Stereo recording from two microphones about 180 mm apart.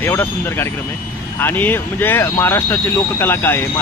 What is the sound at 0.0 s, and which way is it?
Speech, 10° left (ahead or behind).